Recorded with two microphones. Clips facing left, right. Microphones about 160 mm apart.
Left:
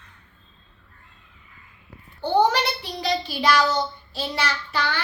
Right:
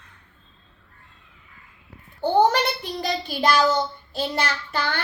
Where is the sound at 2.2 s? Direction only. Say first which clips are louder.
Right 1 dB; 50° right (ahead or behind).